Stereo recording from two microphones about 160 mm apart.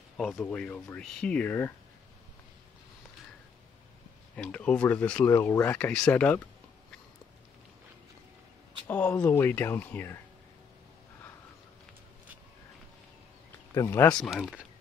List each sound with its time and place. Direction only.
0.2 s speech: centre (ahead or behind)
4.4 s speech: 5° left (ahead or behind)
8.8 s speech: 10° left (ahead or behind)
13.7 s speech: 20° left (ahead or behind)
14.0 s speech: 5° left (ahead or behind)